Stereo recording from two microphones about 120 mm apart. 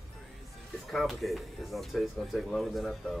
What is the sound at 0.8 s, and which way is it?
Speech, centre (ahead or behind).